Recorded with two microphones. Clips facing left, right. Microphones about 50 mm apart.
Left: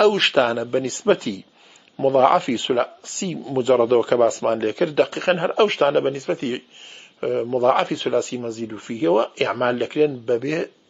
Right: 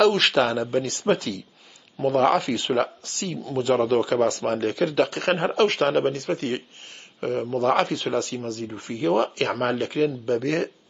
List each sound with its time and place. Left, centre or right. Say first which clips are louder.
0.3 s speech: left 3 dB; centre